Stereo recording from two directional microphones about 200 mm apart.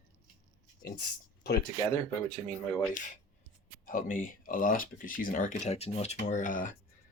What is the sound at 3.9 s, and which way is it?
Speech, 45° left (ahead or behind).